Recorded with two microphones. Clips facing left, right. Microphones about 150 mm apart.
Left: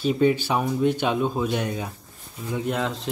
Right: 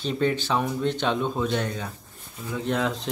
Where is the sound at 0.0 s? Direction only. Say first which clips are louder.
Left 5 dB; 10° left (ahead or behind).